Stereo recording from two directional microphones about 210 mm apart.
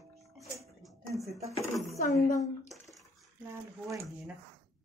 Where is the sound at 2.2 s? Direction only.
35° left (ahead or behind).